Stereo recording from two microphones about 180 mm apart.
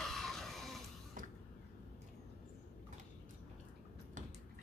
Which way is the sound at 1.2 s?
45° right (ahead or behind).